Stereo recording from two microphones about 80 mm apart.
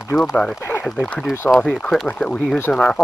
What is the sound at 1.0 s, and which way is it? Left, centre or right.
Speech, centre.